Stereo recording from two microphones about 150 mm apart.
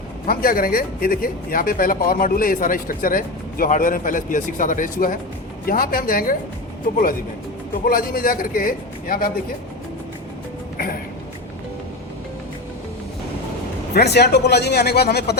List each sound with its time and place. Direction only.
0.3 s speech: 75° left (ahead or behind)
5.6 s speech: 80° left
13.9 s speech: 90° left